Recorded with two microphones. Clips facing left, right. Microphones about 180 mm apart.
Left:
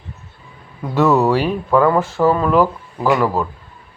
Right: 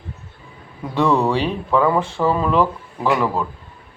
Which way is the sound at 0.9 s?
5° left (ahead or behind).